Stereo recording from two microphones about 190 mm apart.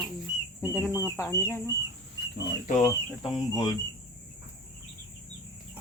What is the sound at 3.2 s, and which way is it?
Speech, 20° left (ahead or behind).